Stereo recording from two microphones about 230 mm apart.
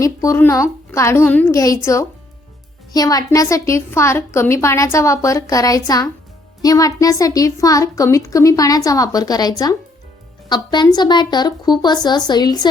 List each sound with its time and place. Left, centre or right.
0.0 s a woman's voice: centre